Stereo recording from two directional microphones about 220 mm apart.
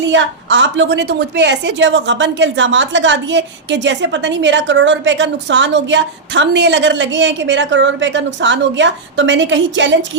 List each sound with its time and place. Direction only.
0.0 s a woman's voice: 55° right (ahead or behind)